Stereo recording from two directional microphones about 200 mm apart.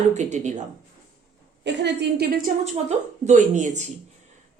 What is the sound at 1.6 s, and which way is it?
Speech, 60° right (ahead or behind).